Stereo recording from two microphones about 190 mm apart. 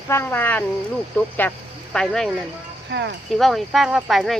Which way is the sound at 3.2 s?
Centre (ahead or behind).